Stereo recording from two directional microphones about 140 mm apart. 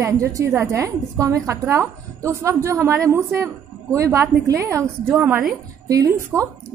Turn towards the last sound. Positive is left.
turn(degrees=-25)  # may be behind; listen again after turning